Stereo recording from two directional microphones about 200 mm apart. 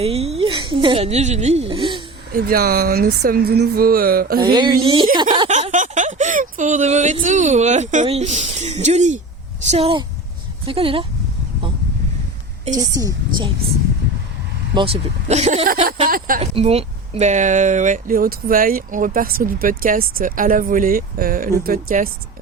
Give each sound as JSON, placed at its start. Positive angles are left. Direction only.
{"t": 0.0, "sound": "speech", "side_deg": -30}
{"t": 2.3, "sound": "speech", "side_deg": -50}
{"t": 4.4, "sound": "speech", "side_deg": -20}
{"t": 5.5, "sound": "speech", "side_deg": -35}
{"t": 12.8, "sound": "a woman's voice", "side_deg": -20}
{"t": 14.8, "sound": "speech", "side_deg": -30}
{"t": 16.4, "sound": "speech", "side_deg": -30}